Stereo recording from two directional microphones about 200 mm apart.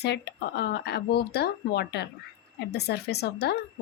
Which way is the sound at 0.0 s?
55° left (ahead or behind).